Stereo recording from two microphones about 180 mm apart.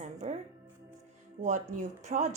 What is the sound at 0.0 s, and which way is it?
Music, 40° right (ahead or behind).